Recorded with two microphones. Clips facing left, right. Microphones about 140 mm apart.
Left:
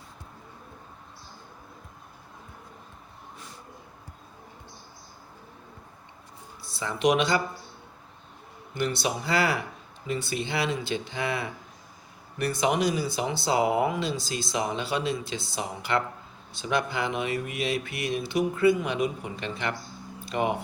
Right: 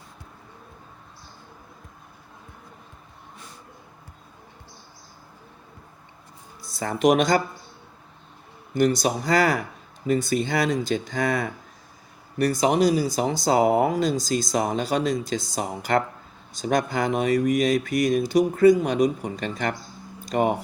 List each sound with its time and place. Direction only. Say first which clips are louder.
6.6 s speech: right 5 dB; 40° right (ahead or behind)
8.7 s speech: right 7 dB; 40° right (ahead or behind)